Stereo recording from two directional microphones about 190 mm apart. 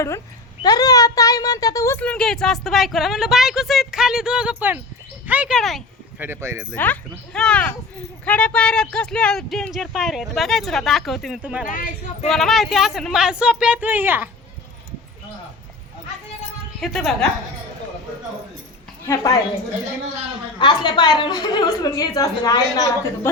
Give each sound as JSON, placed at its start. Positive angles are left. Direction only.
{"t": 0.6, "sound": "a child's voice", "side_deg": 20}
{"t": 6.1, "sound": "speech", "side_deg": -10}
{"t": 6.7, "sound": "a child's voice", "side_deg": 10}
{"t": 11.7, "sound": "speech", "side_deg": 45}
{"t": 12.3, "sound": "a child's voice", "side_deg": 0}
{"t": 16.8, "sound": "a child's voice", "side_deg": 0}
{"t": 19.0, "sound": "a woman's voice", "side_deg": 15}
{"t": 20.6, "sound": "a woman's voice", "side_deg": 25}